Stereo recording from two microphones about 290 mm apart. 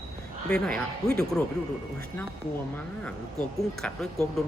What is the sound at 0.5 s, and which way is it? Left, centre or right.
Speech, centre.